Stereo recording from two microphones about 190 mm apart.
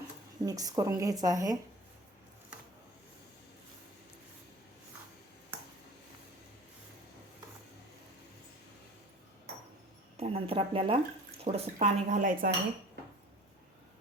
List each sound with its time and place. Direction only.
0.4 s a woman's voice: 20° right (ahead or behind)
10.2 s speech: 30° right (ahead or behind)